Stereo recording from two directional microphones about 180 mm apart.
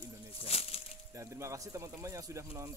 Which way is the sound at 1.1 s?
15° right (ahead or behind).